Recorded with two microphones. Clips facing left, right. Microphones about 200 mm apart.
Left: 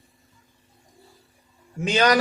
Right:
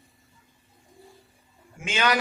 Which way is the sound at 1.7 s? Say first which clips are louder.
Left 6 dB; 40° left (ahead or behind).